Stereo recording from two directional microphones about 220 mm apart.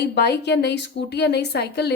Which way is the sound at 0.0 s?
50° left (ahead or behind).